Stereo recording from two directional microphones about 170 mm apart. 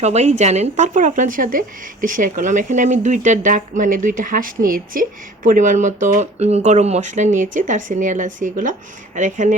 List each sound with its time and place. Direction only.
0.0 s speech: 40° right (ahead or behind)